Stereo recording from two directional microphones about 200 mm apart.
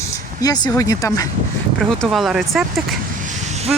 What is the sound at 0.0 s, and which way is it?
Speech, 20° left (ahead or behind).